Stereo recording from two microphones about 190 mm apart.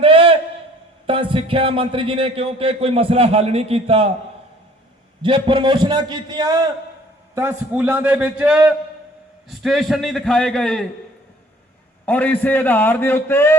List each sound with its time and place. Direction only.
0.0 s a sound: 30° right (ahead or behind)
1.0 s a man's voice: 25° right (ahead or behind)
5.2 s a man's voice: 25° right (ahead or behind)
7.3 s a man's voice: 10° right (ahead or behind)
12.0 s a man's voice: 10° left (ahead or behind)